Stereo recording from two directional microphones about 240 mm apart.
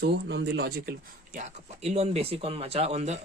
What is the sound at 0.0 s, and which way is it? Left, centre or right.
Speech, right.